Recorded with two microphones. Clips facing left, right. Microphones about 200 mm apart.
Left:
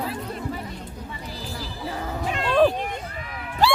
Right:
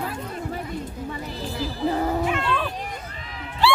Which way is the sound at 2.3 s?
40° left (ahead or behind).